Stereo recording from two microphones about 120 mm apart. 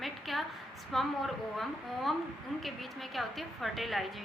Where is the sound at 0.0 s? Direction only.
Centre (ahead or behind).